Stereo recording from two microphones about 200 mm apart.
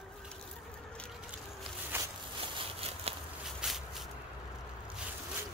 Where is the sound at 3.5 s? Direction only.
Centre (ahead or behind).